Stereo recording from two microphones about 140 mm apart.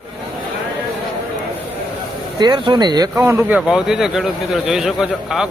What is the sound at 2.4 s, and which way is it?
Speech, 30° right (ahead or behind).